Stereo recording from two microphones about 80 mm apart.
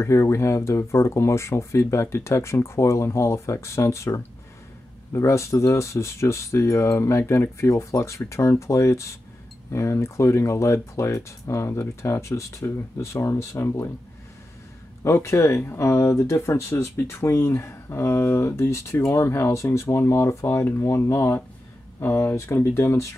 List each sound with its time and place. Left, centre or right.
0.0 s speech: left
15.0 s speech: left